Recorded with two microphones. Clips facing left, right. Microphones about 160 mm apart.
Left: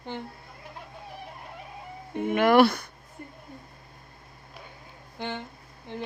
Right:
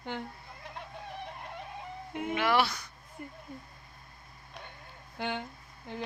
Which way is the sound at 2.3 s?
50° left (ahead or behind).